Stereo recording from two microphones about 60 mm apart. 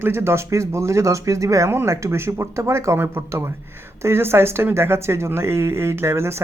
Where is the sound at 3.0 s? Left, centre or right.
Right.